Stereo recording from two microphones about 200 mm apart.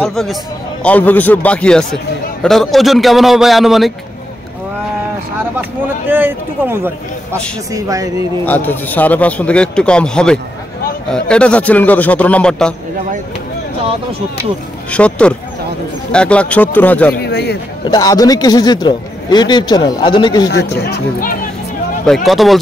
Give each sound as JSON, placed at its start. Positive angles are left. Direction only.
{"t": 0.0, "sound": "a man's voice", "side_deg": 0}
{"t": 5.6, "sound": "a sound", "side_deg": -10}
{"t": 7.7, "sound": "speech", "side_deg": -15}
{"t": 8.5, "sound": "a man's voice", "side_deg": 10}
{"t": 14.9, "sound": "a man's voice", "side_deg": 5}
{"t": 17.2, "sound": "speech", "side_deg": 55}
{"t": 17.8, "sound": "a man's voice", "side_deg": 20}
{"t": 20.4, "sound": "speech", "side_deg": 55}
{"t": 22.0, "sound": "a man's voice", "side_deg": 0}